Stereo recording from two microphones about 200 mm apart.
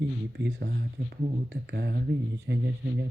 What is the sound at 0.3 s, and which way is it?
Speech, 60° right (ahead or behind).